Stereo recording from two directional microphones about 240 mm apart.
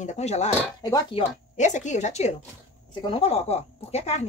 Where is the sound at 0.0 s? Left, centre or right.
Left.